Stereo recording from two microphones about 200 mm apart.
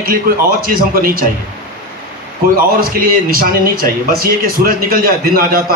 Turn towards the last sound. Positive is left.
turn(degrees=-45)  # may be behind; listen again after turning